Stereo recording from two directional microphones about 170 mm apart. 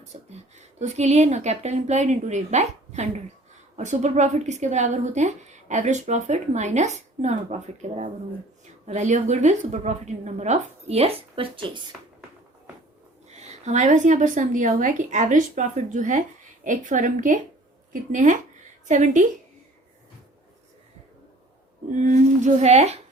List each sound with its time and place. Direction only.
0.1 s a woman's voice: 45° right (ahead or behind)
13.2 s a woman's voice: 40° right (ahead or behind)
22.0 s a woman's voice: 45° right (ahead or behind)